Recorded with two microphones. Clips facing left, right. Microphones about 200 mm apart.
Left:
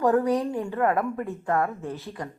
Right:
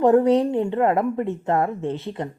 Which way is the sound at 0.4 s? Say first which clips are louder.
Right 5 dB; 20° right (ahead or behind).